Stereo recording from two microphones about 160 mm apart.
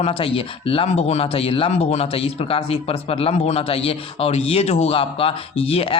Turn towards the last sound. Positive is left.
turn(degrees=35)  # may be behind; listen again after turning